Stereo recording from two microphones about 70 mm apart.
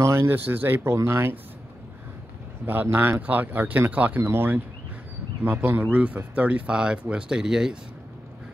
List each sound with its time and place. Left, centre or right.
0.0 s speech: right
2.6 s speech: right
4.2 s speech: right; by 7.7 s centre